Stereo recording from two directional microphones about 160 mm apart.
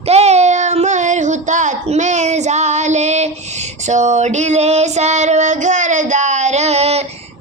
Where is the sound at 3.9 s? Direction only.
45° right (ahead or behind).